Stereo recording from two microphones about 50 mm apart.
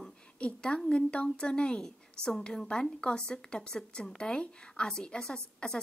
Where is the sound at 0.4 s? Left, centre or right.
Left.